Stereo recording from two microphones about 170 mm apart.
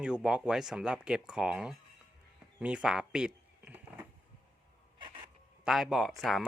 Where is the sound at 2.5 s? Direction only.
5° right (ahead or behind).